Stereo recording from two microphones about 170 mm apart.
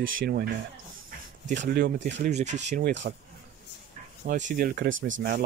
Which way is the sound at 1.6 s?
60° right (ahead or behind).